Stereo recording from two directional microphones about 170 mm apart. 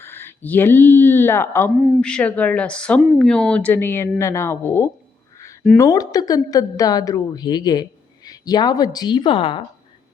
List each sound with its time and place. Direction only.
0.0 s speech: 15° left (ahead or behind)
1.7 s speech: 10° right (ahead or behind)
2.0 s a woman's voice: 5° left (ahead or behind); by 9.6 s 30° left (ahead or behind)